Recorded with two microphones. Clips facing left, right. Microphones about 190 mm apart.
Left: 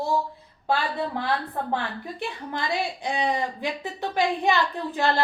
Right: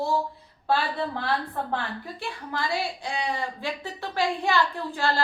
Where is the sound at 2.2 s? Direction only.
20° left (ahead or behind).